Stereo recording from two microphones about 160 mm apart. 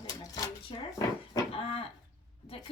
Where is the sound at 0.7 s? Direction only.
30° left (ahead or behind).